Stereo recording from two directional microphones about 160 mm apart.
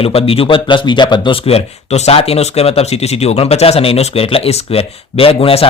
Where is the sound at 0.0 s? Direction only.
35° left (ahead or behind).